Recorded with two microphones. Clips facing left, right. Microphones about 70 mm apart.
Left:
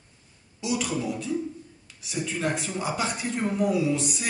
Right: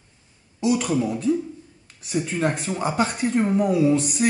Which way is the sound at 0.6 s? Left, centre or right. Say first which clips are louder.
Right 7 dB; right.